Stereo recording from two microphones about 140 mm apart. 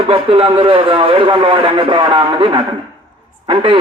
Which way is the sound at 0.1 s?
40° right (ahead or behind).